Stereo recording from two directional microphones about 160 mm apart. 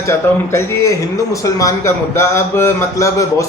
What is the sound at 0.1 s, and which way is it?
Speech, 20° left (ahead or behind).